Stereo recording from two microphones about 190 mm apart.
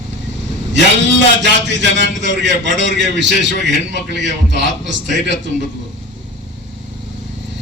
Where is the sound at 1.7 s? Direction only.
70° right (ahead or behind).